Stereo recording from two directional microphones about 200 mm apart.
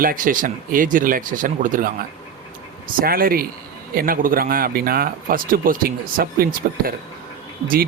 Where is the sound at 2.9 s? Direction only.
45° right (ahead or behind).